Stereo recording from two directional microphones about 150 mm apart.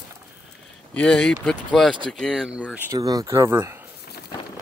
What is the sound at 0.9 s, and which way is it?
Speech, 5° left (ahead or behind).